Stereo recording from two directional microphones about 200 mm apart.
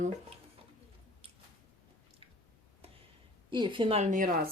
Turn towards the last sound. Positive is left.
turn(degrees=-40)  # may be behind; listen again after turning